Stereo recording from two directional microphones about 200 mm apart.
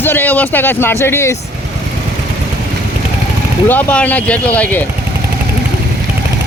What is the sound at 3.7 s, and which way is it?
Speech, 10° left (ahead or behind).